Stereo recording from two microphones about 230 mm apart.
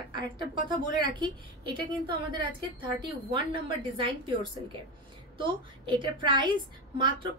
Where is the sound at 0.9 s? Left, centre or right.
Centre.